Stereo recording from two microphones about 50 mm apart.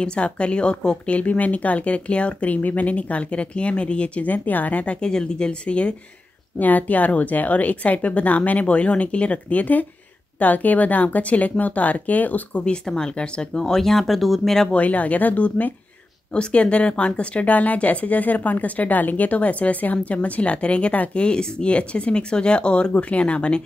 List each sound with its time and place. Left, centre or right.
0.0 s speech: left
5.0 s speech: centre
6.6 s speech: left
12.6 s speech: centre
14.7 s speech: left